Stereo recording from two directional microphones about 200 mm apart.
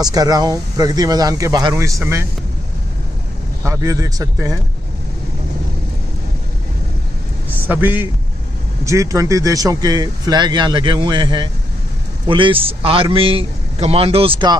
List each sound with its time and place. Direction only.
0.0 s speech: 20° right (ahead or behind)
3.6 s speech: 15° right (ahead or behind)
7.6 s speech: 10° right (ahead or behind); by 14.6 s 25° right (ahead or behind)